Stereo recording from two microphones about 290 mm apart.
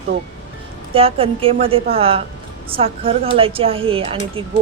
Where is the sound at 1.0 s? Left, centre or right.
Centre.